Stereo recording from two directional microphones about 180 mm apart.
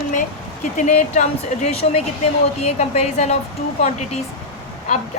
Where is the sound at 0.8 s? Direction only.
40° left (ahead or behind).